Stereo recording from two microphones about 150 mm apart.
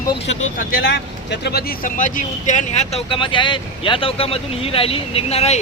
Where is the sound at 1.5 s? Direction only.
85° left.